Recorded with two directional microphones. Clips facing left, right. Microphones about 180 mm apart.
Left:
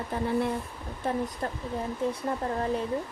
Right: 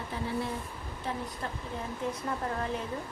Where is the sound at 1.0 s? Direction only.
45° left (ahead or behind).